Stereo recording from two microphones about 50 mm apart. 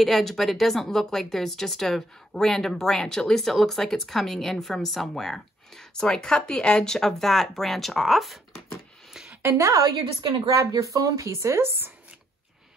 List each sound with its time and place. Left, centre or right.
0.0 s speech: centre
9.4 s a woman's voice: right
10.6 s speech: right